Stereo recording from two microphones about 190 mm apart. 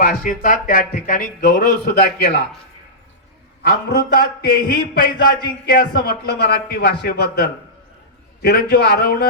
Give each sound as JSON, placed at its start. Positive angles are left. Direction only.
{"t": 0.0, "sound": "speech", "side_deg": 45}
{"t": 3.6, "sound": "a man's voice", "side_deg": 55}